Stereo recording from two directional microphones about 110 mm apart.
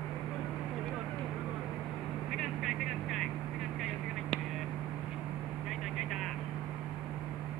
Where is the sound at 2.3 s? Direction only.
Centre (ahead or behind).